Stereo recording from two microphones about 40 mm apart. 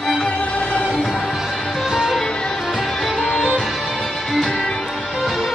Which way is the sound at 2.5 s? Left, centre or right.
Centre.